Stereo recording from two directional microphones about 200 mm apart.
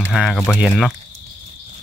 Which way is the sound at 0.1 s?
Centre (ahead or behind).